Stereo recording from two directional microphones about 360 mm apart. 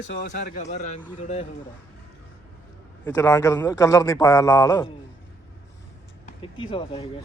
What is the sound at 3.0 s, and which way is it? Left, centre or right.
A man's voice, centre.